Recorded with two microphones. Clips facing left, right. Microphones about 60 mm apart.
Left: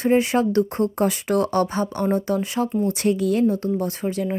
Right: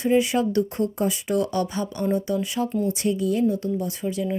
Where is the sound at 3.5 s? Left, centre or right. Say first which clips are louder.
Left 2 dB; left.